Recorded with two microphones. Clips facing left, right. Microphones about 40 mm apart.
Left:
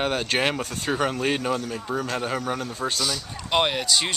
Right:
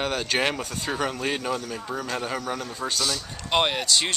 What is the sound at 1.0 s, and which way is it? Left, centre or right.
Speech, centre.